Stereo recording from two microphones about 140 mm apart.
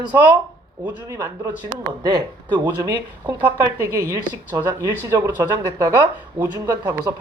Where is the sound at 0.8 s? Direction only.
25° right (ahead or behind).